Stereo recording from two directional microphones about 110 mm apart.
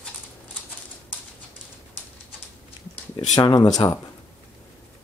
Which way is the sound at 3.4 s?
35° left (ahead or behind).